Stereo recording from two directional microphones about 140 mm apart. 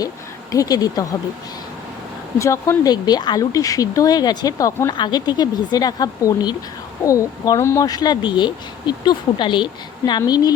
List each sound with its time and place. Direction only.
0.5 s speech: 25° left (ahead or behind)
2.4 s speech: 20° left (ahead or behind)